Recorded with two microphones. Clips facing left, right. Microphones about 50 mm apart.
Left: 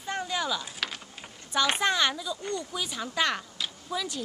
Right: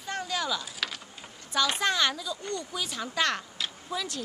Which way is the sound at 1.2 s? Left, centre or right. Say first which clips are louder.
Left 1 dB; left.